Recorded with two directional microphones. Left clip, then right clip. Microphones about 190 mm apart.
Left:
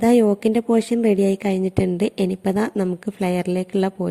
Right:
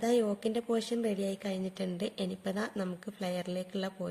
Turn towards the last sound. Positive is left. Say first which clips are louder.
# left 15 dB
turn(degrees=35)  # may be behind; listen again after turning